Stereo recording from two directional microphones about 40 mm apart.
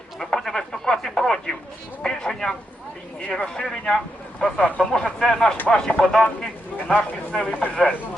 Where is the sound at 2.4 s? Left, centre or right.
Left.